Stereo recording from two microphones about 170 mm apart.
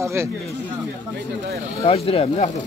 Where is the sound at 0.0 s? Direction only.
15° right (ahead or behind).